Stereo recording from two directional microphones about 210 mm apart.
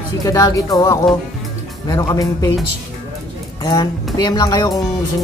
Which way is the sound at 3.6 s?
20° left (ahead or behind).